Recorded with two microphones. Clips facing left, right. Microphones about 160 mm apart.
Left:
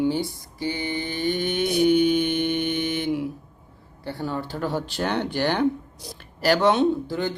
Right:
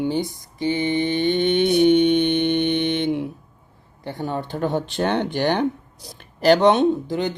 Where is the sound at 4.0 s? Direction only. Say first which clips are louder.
Right 2 dB; 20° right (ahead or behind).